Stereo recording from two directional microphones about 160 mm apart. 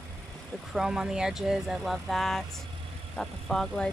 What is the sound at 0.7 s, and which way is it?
Speech, 5° right (ahead or behind).